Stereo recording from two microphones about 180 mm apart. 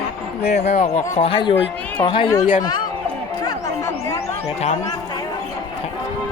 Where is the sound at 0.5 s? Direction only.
40° left (ahead or behind).